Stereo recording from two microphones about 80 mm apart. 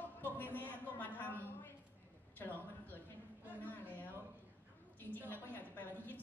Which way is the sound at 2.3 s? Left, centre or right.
Left.